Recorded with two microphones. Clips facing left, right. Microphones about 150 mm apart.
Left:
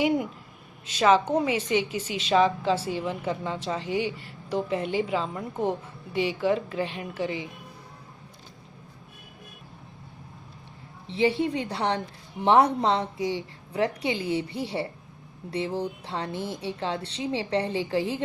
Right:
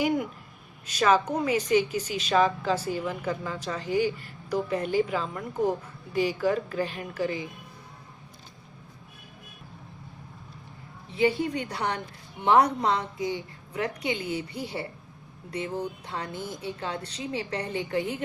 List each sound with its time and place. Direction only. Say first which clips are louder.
0.9 s a woman's voice: left 2 dB; 25° left (ahead or behind)
11.1 s a woman's voice: left 1 dB; 25° left (ahead or behind)